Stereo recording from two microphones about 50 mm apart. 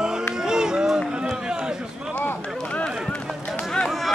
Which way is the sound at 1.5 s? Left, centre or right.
Centre.